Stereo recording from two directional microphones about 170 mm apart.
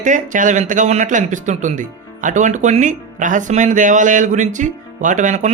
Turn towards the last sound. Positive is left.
turn(degrees=-45)  # may be behind; listen again after turning